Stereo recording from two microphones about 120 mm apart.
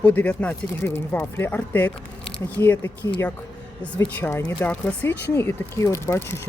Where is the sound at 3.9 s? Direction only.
20° left (ahead or behind).